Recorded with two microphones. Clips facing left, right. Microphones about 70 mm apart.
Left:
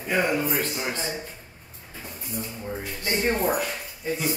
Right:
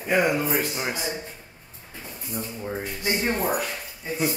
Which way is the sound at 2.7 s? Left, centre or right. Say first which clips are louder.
Right 3 dB; centre.